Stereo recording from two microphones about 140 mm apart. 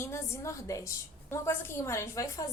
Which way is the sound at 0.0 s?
20° left (ahead or behind).